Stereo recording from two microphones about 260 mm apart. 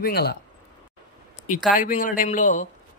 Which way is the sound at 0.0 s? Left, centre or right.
Left.